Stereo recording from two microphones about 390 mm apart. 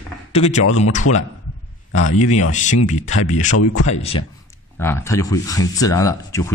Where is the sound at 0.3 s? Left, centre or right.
Centre.